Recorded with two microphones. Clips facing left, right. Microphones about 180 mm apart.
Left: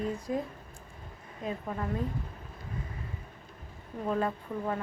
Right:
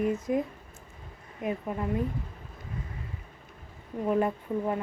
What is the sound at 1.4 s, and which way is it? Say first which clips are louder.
Speech: right 4 dB; 15° right (ahead or behind).